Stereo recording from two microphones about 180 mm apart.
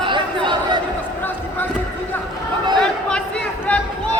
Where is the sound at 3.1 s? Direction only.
5° left (ahead or behind).